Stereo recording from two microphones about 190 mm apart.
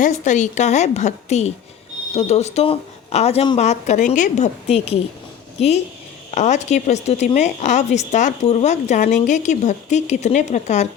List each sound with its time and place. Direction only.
0.0 s speech: 40° left (ahead or behind)